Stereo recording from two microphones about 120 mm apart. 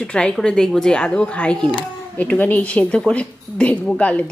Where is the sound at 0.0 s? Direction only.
10° left (ahead or behind).